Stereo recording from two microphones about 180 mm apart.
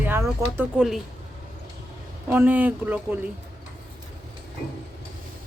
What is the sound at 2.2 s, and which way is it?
Speech, 10° right (ahead or behind).